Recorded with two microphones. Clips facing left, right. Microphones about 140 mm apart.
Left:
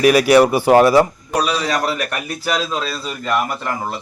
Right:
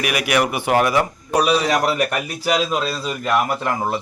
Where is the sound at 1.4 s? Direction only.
20° right (ahead or behind).